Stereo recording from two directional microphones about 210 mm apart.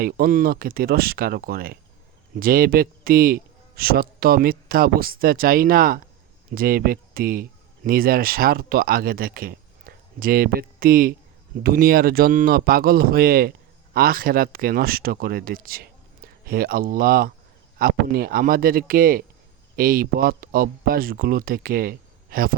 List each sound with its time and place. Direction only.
0.0 s a man's voice: 40° right (ahead or behind)